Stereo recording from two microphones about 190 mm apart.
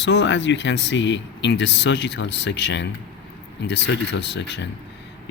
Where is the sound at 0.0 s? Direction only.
65° left (ahead or behind).